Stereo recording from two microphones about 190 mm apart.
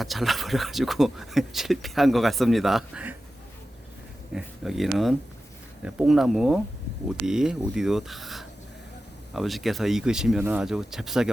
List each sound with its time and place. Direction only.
0.0 s speech: centre (ahead or behind)
4.4 s speech: centre (ahead or behind)